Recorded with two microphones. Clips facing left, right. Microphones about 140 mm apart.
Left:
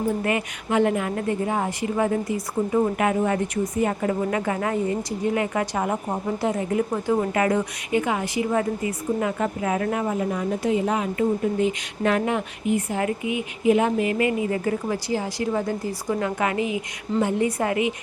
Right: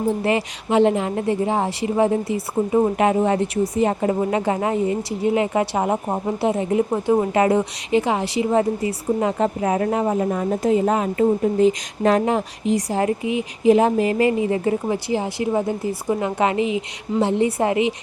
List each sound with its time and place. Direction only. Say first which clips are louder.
0.1 s speech: right 4 dB; 30° right (ahead or behind)